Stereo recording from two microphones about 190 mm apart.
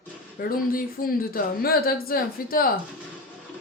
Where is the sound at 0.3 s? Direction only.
50° left (ahead or behind).